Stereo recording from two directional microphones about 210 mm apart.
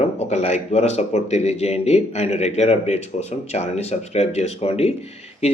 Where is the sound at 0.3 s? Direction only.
30° left (ahead or behind).